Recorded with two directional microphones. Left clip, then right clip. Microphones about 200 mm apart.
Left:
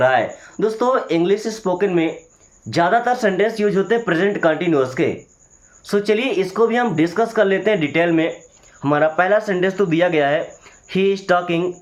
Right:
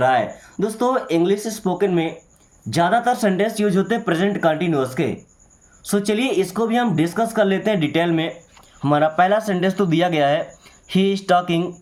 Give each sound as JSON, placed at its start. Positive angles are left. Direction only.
{"t": 0.0, "sound": "speech", "side_deg": -35}